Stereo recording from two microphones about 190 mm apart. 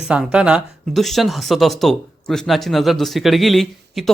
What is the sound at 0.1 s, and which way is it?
Speech, 5° right (ahead or behind).